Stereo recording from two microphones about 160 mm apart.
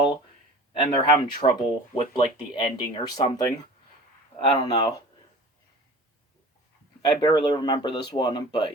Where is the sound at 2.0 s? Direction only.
30° left (ahead or behind).